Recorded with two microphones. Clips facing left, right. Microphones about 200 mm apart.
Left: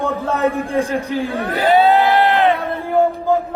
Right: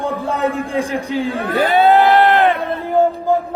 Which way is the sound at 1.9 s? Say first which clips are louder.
Right 2 dB; 55° right (ahead or behind).